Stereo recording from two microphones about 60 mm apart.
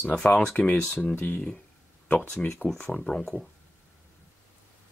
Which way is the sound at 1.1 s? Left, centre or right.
Left.